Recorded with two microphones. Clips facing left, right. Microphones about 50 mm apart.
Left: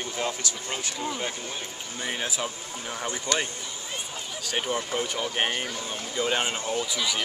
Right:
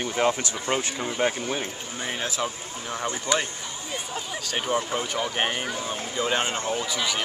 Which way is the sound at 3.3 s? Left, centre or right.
Centre.